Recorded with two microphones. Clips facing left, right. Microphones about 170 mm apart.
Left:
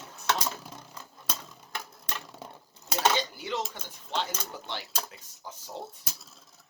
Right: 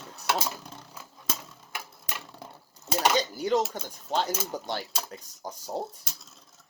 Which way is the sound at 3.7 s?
45° right (ahead or behind).